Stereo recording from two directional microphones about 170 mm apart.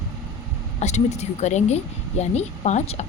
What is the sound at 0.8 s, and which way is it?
A woman's voice, 40° left (ahead or behind).